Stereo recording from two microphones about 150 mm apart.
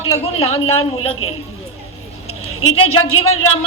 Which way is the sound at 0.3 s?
45° left (ahead or behind).